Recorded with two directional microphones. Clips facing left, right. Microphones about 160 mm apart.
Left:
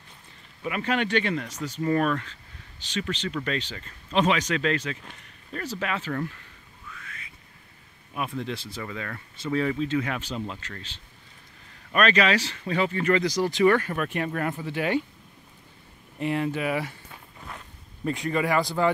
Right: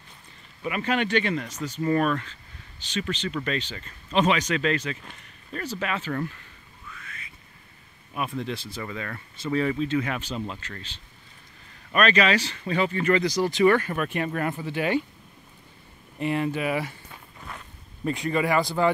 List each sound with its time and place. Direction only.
0.7 s speech: 10° right (ahead or behind)
8.1 s speech: 10° right (ahead or behind)
10.1 s speech: 5° right (ahead or behind)
11.9 s speech: centre (ahead or behind)
13.6 s speech: 15° right (ahead or behind)
16.2 s speech: 10° right (ahead or behind)
18.0 s speech: 20° right (ahead or behind)